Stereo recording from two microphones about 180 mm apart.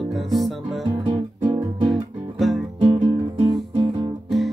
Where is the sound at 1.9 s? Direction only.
Centre (ahead or behind).